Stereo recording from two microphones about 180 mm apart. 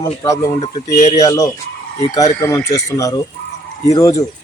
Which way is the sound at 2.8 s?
20° left (ahead or behind).